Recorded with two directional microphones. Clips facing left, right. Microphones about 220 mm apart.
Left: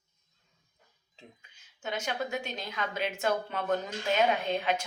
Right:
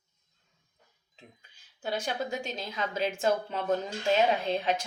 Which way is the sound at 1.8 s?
35° right (ahead or behind).